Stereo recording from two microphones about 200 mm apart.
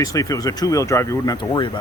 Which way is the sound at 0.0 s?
15° left (ahead or behind).